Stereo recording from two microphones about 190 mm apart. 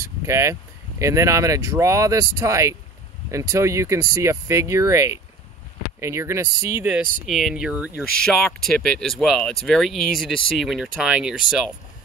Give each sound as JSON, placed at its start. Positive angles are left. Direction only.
{"t": 0.2, "sound": "speech", "side_deg": -15}
{"t": 7.2, "sound": "speech", "side_deg": 0}